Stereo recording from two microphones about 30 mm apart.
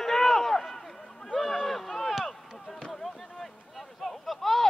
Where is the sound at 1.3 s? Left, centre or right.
Centre.